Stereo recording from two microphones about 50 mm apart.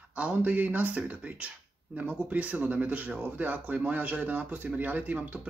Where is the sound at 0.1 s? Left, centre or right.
Right.